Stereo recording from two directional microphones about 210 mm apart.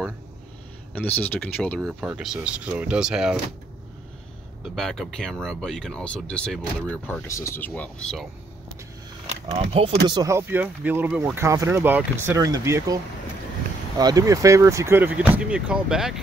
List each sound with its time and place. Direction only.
0.9 s speech: 10° left (ahead or behind)
4.6 s speech: centre (ahead or behind)
9.5 s speech: 25° right (ahead or behind); by 16.2 s 5° right (ahead or behind)